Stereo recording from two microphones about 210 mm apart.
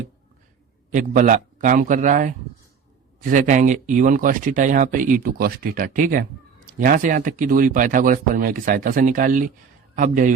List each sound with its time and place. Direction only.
0.9 s a man's voice: 35° right (ahead or behind)